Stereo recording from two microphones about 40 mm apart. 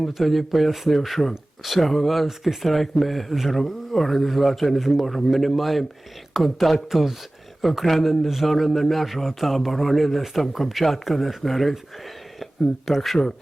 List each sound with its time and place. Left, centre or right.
0.1 s speech: centre
12.9 s speech: centre